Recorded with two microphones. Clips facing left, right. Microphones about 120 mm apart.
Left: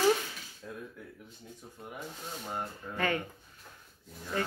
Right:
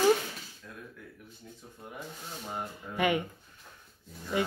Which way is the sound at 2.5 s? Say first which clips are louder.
Right 1 dB; 15° right (ahead or behind).